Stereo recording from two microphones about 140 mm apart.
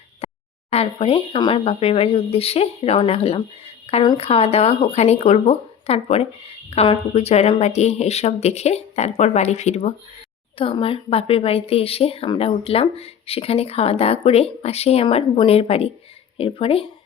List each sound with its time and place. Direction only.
0.2 s a sound: 50° left (ahead or behind)
0.7 s speech: 45° left (ahead or behind)
10.6 s speech: 40° left (ahead or behind)